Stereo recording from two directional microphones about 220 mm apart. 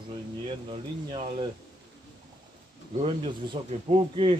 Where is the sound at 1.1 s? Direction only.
25° right (ahead or behind).